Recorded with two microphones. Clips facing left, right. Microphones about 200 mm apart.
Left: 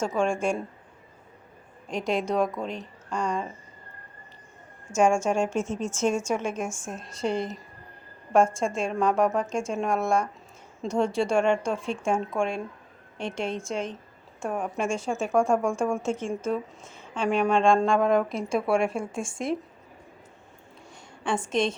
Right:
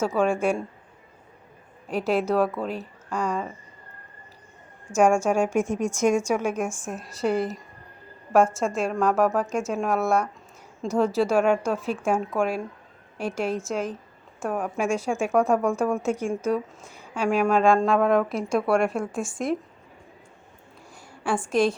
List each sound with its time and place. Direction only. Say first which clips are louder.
0.2 s a woman's voice: right 2 dB; 5° right (ahead or behind)
1.9 s a woman's voice: right 3 dB; 5° right (ahead or behind)
4.9 s a woman's voice: right 2 dB; 10° right (ahead or behind)
18.9 s a woman's voice: right 3 dB; 25° left (ahead or behind)
21.5 s a woman's voice: right 5 dB; 25° left (ahead or behind)